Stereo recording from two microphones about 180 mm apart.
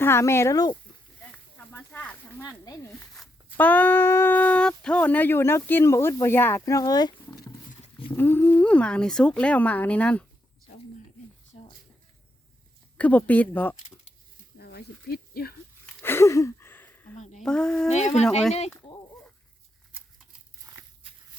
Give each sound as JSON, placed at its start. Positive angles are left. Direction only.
{"t": 0.0, "sound": "speech", "side_deg": 15}
{"t": 1.2, "sound": "a sound", "side_deg": 10}
{"t": 2.4, "sound": "speech", "side_deg": 20}
{"t": 2.9, "sound": "speech", "side_deg": 5}
{"t": 13.0, "sound": "speech", "side_deg": 10}
{"t": 14.6, "sound": "a sound", "side_deg": 60}
{"t": 16.0, "sound": "a sound", "side_deg": 15}
{"t": 17.4, "sound": "speech", "side_deg": 5}
{"t": 17.9, "sound": "speech", "side_deg": 40}